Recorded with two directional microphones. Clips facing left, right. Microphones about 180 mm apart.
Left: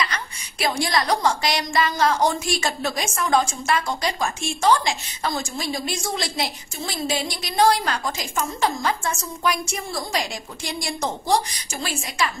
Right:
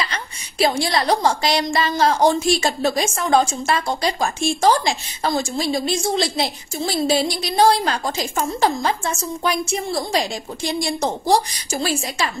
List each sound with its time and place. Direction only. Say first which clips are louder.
0.0 s a woman's voice: even; 30° right (ahead or behind)